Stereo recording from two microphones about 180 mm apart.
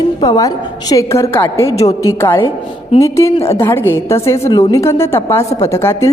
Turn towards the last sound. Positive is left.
turn(degrees=15)  # may be behind; listen again after turning